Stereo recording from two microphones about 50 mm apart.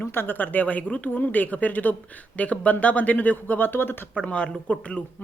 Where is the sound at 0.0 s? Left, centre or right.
Left.